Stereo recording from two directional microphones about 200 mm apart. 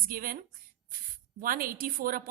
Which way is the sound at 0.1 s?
45° right (ahead or behind).